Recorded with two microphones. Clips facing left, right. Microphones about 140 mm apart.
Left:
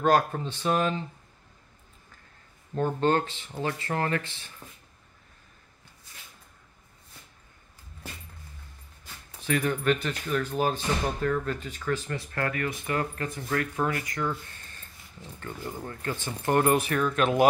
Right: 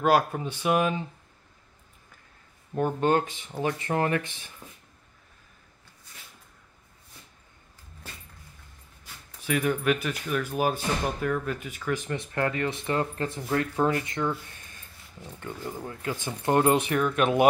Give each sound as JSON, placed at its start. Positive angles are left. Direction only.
{"t": 0.0, "sound": "speech", "side_deg": -10}
{"t": 2.7, "sound": "speech", "side_deg": -10}
{"t": 9.4, "sound": "speech", "side_deg": -10}
{"t": 14.3, "sound": "a sound", "side_deg": -15}
{"t": 15.4, "sound": "speech", "side_deg": -10}
{"t": 17.0, "sound": "speech", "side_deg": -10}